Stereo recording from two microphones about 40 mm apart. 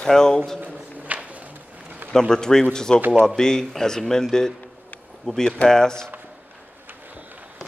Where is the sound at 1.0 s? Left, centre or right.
Right.